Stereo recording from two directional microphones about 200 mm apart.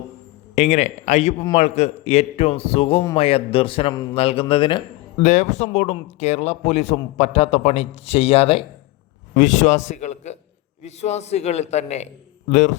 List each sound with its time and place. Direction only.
0.5 s speech: 35° left (ahead or behind)
5.2 s a man's voice: 35° left (ahead or behind)